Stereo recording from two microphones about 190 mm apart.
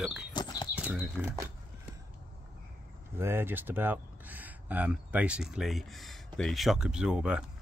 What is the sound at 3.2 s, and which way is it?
Speech, 10° right (ahead or behind).